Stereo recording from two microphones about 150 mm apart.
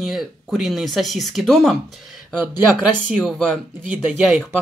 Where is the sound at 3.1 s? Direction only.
Centre (ahead or behind).